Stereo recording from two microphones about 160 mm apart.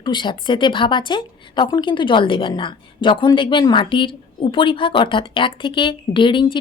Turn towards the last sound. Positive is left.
turn(degrees=30)  # may be behind; listen again after turning